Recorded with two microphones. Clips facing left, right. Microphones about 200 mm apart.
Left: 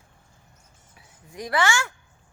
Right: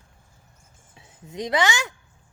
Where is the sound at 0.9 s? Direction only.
25° right (ahead or behind).